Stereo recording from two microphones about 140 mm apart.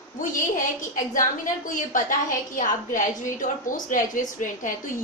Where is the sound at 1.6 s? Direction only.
70° left (ahead or behind).